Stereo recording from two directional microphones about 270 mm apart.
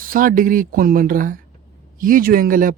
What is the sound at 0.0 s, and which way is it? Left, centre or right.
Speech, right.